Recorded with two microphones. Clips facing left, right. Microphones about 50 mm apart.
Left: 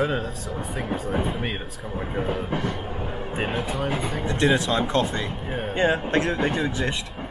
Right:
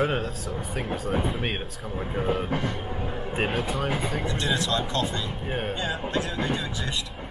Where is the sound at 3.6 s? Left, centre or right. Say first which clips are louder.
Left 1 dB; centre.